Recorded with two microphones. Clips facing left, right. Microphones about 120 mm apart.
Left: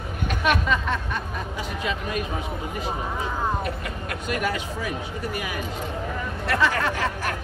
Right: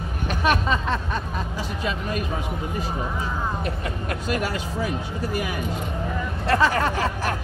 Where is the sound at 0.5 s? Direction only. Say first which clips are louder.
Right 1 dB; 35° right (ahead or behind).